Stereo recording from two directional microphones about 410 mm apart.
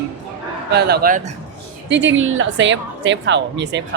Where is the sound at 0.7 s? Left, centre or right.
Right.